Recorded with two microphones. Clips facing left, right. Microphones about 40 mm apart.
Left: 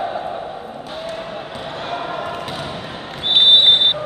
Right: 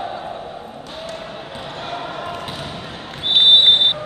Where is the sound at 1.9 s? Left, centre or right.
Centre.